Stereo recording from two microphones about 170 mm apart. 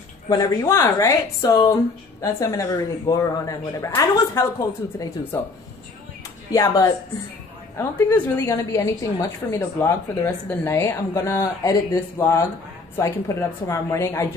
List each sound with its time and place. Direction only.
0.3 s a woman's voice: 20° left (ahead or behind)
6.5 s a woman's voice: 20° left (ahead or behind)